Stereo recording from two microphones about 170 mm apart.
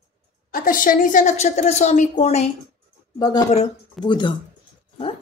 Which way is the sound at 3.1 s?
25° left (ahead or behind).